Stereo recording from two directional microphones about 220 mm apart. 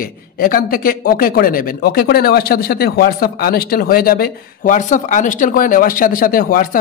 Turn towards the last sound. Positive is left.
turn(degrees=40)  # may be behind; listen again after turning